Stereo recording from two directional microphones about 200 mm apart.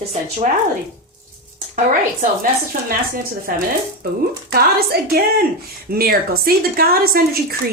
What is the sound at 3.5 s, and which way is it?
Speech, 50° right (ahead or behind).